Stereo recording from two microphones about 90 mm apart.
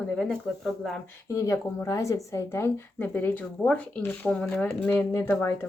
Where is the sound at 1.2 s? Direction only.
35° left (ahead or behind).